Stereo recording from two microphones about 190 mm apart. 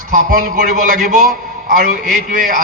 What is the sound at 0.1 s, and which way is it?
A man's voice, 45° right (ahead or behind).